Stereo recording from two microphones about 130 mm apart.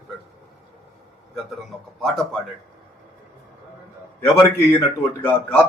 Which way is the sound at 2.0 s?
Centre (ahead or behind).